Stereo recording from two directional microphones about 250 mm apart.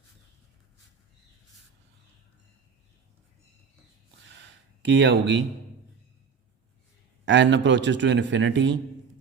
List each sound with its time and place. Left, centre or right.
4.9 s a man's voice: right
7.3 s a man's voice: right